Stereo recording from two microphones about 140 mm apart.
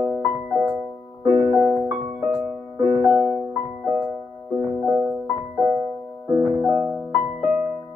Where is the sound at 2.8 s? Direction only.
35° right (ahead or behind).